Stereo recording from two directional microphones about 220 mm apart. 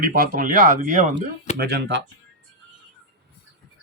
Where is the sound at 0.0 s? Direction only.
40° right (ahead or behind).